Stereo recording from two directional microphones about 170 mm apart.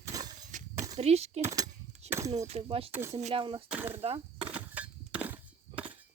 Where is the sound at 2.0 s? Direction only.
40° right (ahead or behind).